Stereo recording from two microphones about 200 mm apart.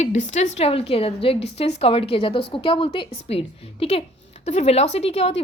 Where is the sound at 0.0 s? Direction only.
35° left (ahead or behind).